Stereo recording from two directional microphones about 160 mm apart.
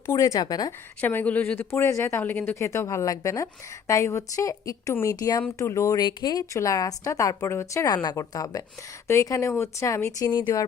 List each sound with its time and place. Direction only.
0.0 s speech: 20° left (ahead or behind)
1.0 s speech: 10° left (ahead or behind)